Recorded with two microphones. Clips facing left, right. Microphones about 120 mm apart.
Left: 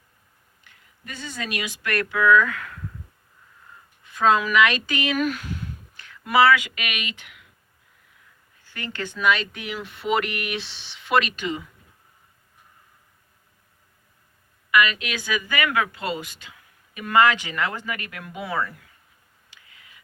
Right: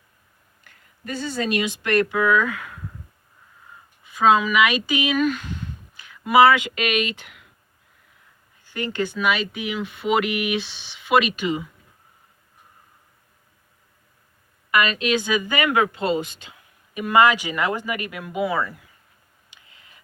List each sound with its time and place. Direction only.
0.6 s speech: 40° right (ahead or behind); by 2.8 s 15° right (ahead or behind)
4.0 s speech: 5° right (ahead or behind)
5.1 s speech: 5° left (ahead or behind)
6.0 s speech: 10° right (ahead or behind); by 7.4 s 35° right (ahead or behind)
8.6 s speech: 15° right (ahead or behind)
14.7 s a woman's voice: 35° right (ahead or behind); by 18.7 s 5° right (ahead or behind)
19.6 s a sound: 30° right (ahead or behind)